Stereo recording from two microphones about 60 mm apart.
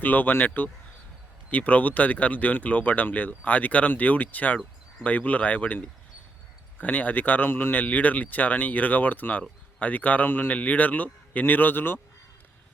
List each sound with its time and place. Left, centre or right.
0.0 s speech: left